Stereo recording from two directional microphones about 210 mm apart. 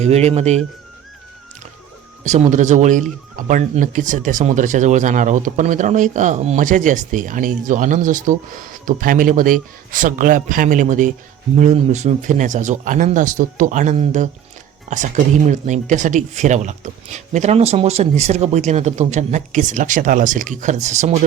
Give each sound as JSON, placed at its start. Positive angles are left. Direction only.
{"t": 0.0, "sound": "speech", "side_deg": -30}
{"t": 2.2, "sound": "speech", "side_deg": -35}